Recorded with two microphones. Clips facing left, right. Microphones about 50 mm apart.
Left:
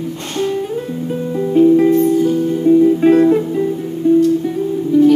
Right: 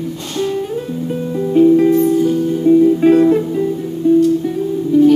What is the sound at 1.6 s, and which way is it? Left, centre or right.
Music, centre.